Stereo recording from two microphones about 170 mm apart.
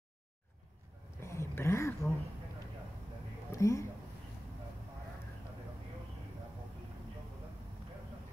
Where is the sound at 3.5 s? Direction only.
20° left (ahead or behind).